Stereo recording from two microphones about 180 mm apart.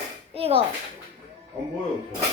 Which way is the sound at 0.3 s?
35° right (ahead or behind).